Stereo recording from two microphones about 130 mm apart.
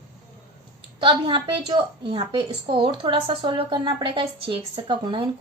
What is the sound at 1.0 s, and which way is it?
A woman's voice, 40° right (ahead or behind).